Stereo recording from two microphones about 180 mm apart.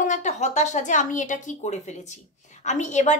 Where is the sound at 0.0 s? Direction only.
45° left (ahead or behind).